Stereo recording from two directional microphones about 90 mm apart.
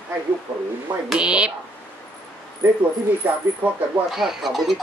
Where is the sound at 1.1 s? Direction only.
10° right (ahead or behind).